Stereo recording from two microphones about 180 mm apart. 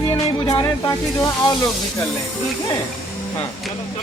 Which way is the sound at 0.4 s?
20° left (ahead or behind).